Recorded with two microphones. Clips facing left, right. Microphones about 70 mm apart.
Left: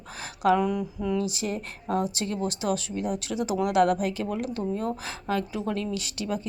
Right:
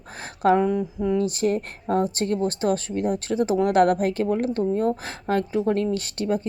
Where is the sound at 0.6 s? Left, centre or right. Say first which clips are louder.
Right 5 dB; right.